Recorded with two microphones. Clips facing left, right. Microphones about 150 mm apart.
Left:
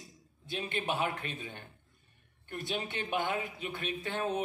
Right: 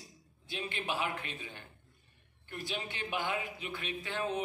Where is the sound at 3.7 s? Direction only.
50° left (ahead or behind).